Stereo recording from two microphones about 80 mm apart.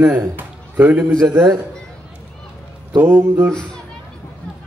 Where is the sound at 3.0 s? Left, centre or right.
Right.